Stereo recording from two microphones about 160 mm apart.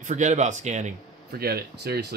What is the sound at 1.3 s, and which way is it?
Speech, 75° right (ahead or behind).